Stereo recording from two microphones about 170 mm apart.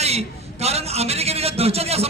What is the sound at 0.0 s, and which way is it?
A man's voice, 40° right (ahead or behind).